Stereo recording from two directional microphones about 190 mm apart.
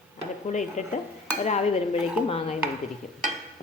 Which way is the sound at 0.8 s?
40° left (ahead or behind).